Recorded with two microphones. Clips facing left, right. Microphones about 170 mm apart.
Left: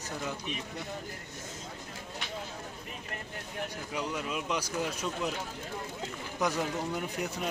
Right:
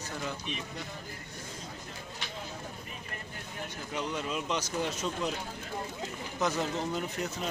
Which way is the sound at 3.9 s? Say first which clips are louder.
Right 1 dB; 5° left (ahead or behind).